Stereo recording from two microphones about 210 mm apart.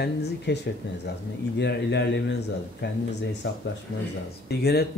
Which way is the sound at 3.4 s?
65° left (ahead or behind).